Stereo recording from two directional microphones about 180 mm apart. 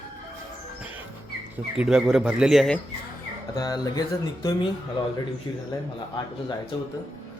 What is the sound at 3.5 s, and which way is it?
Speech, 20° left (ahead or behind).